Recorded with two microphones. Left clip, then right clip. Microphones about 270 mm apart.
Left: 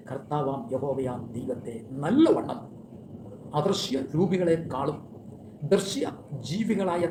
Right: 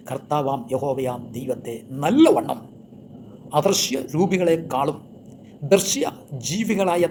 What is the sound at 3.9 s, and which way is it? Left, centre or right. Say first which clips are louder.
Speech: right 5 dB; right.